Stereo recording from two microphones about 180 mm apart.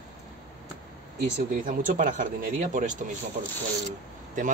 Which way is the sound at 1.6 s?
45° right (ahead or behind).